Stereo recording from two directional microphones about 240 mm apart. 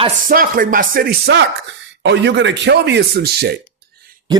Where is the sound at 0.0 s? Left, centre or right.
Right.